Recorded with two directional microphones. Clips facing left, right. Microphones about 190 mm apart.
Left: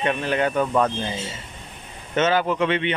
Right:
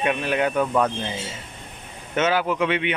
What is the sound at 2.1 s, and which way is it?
Speech, 10° right (ahead or behind).